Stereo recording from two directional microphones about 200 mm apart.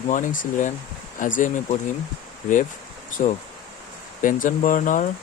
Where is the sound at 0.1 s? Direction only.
40° left (ahead or behind).